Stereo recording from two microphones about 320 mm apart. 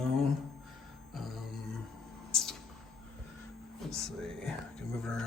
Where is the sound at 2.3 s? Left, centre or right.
Centre.